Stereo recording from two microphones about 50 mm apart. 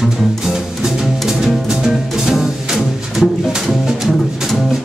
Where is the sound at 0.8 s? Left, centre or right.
Centre.